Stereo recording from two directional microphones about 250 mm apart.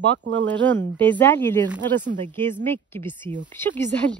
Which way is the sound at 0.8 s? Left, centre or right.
Centre.